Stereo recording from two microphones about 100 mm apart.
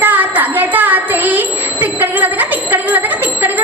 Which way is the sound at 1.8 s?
15° right (ahead or behind).